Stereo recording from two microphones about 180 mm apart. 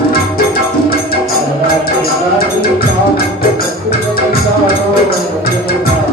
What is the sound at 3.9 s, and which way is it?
Music, 55° left (ahead or behind).